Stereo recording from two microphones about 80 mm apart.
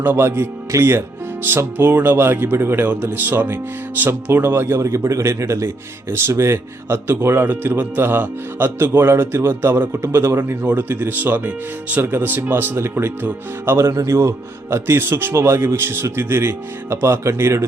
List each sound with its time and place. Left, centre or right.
0.0 s speech: right